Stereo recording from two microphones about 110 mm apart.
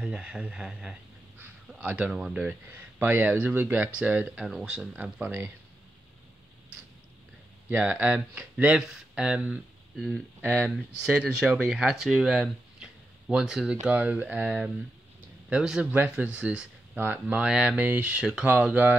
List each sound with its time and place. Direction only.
0.0 s speech: 10° right (ahead or behind)
4.5 s speech: 5° right (ahead or behind)
7.7 s speech: 20° right (ahead or behind); by 10.2 s centre (ahead or behind)
10.4 s speech: 20° right (ahead or behind)
10.7 s speech: 10° right (ahead or behind)